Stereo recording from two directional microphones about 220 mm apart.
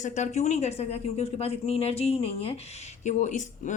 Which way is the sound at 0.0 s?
35° left (ahead or behind).